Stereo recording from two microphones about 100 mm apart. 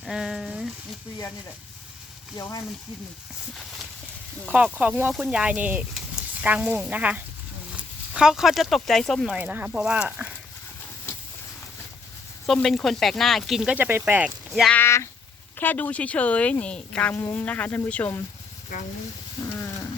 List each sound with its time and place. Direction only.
0.0 s speech: 5° right (ahead or behind)
2.3 s speech: 45° left (ahead or behind)
4.5 s speech: 15° right (ahead or behind); by 9.3 s 5° left (ahead or behind)
9.3 s speech: 15° right (ahead or behind)
12.6 s speech: 5° left (ahead or behind)
13.7 s speech: 20° right (ahead or behind)
15.5 s speech: 15° left (ahead or behind)
19.4 s a sound: 30° left (ahead or behind)